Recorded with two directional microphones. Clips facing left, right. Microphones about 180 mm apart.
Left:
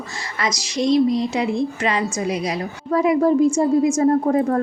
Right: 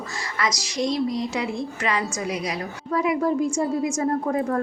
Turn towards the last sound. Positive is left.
turn(degrees=35)  # may be behind; listen again after turning